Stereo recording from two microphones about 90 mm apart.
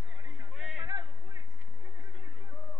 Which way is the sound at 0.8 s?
55° right (ahead or behind).